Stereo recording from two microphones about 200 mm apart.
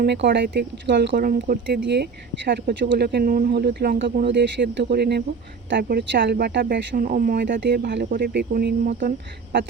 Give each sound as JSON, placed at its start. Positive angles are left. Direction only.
{"t": 0.0, "sound": "speech", "side_deg": -55}
{"t": 7.4, "sound": "speech", "side_deg": -60}